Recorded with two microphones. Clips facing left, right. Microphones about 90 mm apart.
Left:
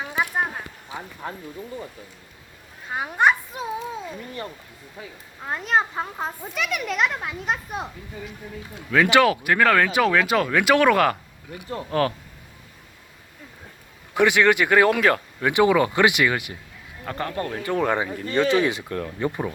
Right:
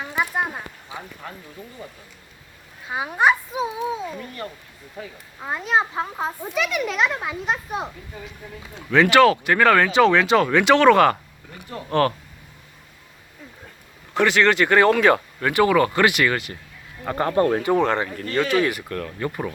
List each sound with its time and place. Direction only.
0.0 s a sound: 5° left (ahead or behind)
2.9 s a child's voice: 5° right (ahead or behind)
5.4 s a child's voice: 5° right (ahead or behind)
9.0 s speech: 15° left (ahead or behind)
9.3 s a child's voice: 5° left (ahead or behind)
14.1 s speech: 15° left (ahead or behind)
17.2 s speech: 35° right (ahead or behind)
17.7 s speech: 10° left (ahead or behind)